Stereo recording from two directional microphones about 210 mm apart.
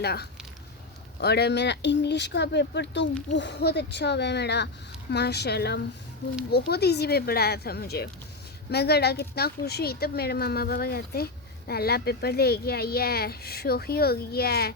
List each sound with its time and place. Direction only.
0.0 s speech: 50° left (ahead or behind)